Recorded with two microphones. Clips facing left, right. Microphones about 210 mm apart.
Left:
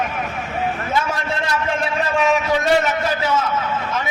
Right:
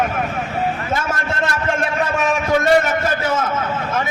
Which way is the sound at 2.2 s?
50° right (ahead or behind).